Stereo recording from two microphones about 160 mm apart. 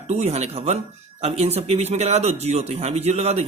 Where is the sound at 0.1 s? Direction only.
45° right (ahead or behind).